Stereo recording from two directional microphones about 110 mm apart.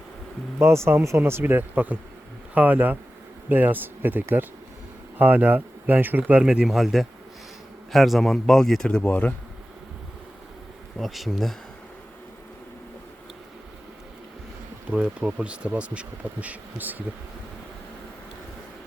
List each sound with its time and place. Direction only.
0.6 s speech: 25° right (ahead or behind); by 9.3 s 10° left (ahead or behind)
11.0 s speech: centre (ahead or behind)
14.9 s speech: 10° right (ahead or behind)